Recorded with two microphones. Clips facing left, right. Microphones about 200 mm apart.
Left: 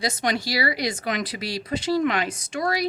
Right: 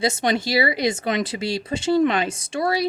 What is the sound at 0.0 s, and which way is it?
Speech, 25° right (ahead or behind).